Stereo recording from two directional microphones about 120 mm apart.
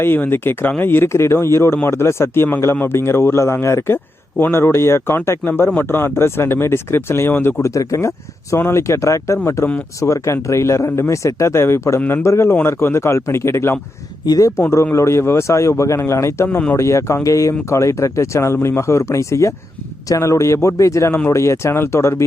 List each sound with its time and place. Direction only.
0.0 s speech: 20° left (ahead or behind)